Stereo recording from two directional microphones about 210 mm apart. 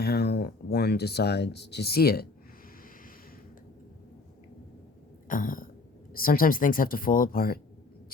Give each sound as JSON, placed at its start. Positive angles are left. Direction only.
{"t": 0.0, "sound": "speech", "side_deg": 50}
{"t": 5.3, "sound": "throat clearing", "side_deg": 40}
{"t": 6.1, "sound": "speech", "side_deg": 45}